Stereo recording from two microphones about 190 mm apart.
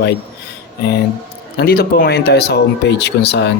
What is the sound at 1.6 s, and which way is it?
Speech, 55° left (ahead or behind).